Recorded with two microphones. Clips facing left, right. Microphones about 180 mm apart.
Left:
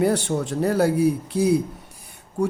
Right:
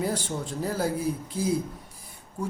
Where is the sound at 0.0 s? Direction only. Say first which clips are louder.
Left 8 dB; 70° left (ahead or behind).